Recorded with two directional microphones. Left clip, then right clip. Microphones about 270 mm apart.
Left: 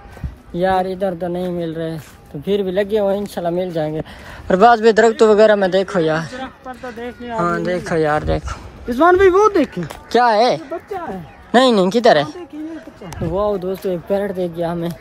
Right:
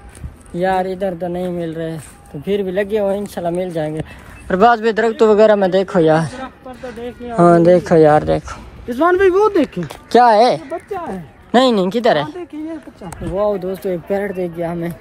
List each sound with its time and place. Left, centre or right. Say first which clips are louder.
0.6 s speech: even; centre
8.8 s speech: left 2 dB; left
9.6 s speech: right 1 dB; centre